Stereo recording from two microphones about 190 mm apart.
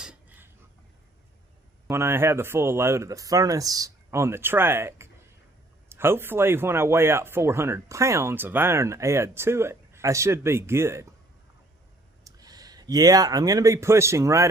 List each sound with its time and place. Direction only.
0.0 s a sound: 5° right (ahead or behind)
1.9 s speech: 15° right (ahead or behind)
12.2 s speech: 20° right (ahead or behind)